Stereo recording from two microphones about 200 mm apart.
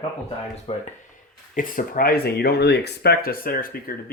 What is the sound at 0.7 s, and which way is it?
Speech, 30° left (ahead or behind).